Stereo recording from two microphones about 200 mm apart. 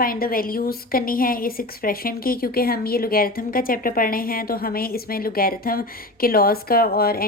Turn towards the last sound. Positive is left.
turn(degrees=50)  # may be behind; listen again after turning